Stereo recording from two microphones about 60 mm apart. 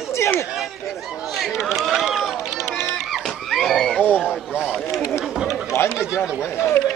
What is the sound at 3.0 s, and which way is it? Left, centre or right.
Dog, centre.